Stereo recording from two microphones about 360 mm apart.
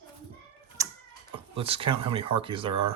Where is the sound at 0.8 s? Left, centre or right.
Centre.